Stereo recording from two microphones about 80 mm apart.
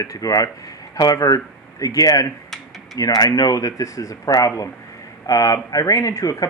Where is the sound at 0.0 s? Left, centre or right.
Left.